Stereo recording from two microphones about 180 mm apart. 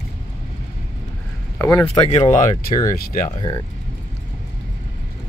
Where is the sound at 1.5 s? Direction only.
15° left (ahead or behind).